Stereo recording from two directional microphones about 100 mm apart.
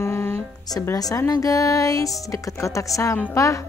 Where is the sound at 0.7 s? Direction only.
40° left (ahead or behind).